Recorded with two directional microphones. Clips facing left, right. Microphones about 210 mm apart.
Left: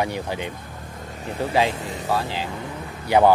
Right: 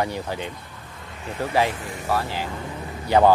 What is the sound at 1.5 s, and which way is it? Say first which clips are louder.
Speech: left 1 dB; 20° left (ahead or behind).